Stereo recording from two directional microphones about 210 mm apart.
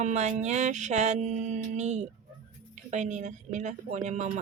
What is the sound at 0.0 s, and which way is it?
Music, 35° right (ahead or behind).